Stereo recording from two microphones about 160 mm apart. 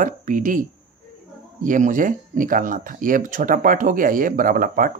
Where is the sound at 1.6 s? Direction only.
55° right (ahead or behind).